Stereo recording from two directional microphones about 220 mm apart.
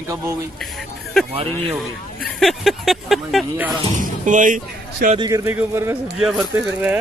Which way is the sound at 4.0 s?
35° right (ahead or behind).